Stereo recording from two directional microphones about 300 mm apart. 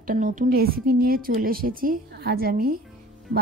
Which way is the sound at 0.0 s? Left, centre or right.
Right.